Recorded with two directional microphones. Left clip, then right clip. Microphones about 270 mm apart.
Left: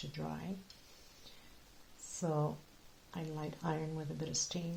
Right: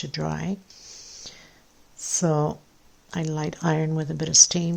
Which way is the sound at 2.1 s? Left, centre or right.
Right.